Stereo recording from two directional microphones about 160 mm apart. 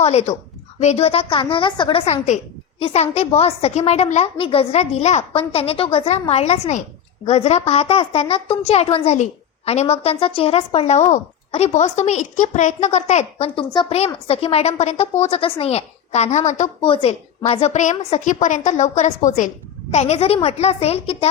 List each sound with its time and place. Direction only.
0.0 s a woman's voice: 40° left (ahead or behind)
16.8 s a woman's voice: 35° left (ahead or behind)